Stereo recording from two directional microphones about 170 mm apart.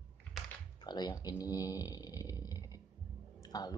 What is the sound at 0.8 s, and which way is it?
Speech, 25° left (ahead or behind).